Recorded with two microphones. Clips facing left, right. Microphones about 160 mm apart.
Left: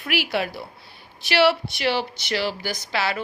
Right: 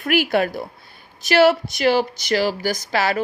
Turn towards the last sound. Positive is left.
turn(degrees=-45)  # may be behind; listen again after turning